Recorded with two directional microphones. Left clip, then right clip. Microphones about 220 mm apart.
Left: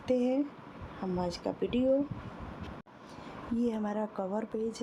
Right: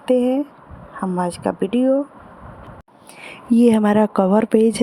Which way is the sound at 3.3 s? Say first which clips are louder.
Right 18 dB; 40° right (ahead or behind).